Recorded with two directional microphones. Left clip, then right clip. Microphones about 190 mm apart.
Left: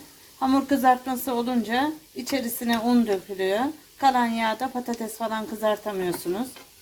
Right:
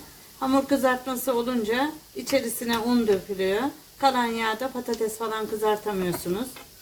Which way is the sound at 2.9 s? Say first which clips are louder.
Right 1 dB; 50° left (ahead or behind).